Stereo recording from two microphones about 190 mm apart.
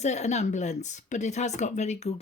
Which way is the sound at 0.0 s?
35° left (ahead or behind).